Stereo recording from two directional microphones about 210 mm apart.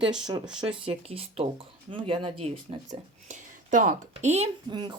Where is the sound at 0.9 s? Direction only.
25° right (ahead or behind).